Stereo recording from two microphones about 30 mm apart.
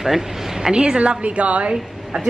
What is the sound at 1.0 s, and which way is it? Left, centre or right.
Speech, right.